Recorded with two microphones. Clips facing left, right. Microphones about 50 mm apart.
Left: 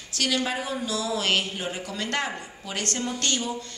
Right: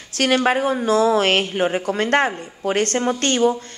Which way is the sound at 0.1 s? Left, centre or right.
Right.